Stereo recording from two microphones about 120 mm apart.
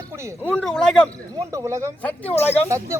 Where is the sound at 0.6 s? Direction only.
5° left (ahead or behind).